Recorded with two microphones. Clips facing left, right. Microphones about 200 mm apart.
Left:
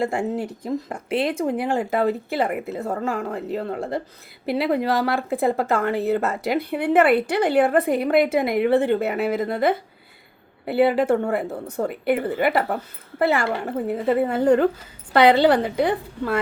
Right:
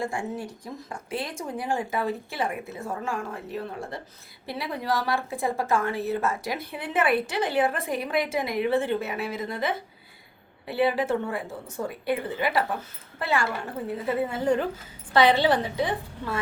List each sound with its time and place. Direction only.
0.0 s a woman's voice: 65° left (ahead or behind)